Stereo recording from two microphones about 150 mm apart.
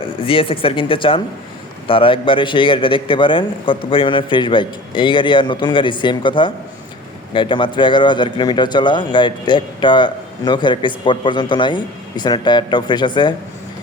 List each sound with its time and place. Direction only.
0.0 s a man's voice: 35° left (ahead or behind)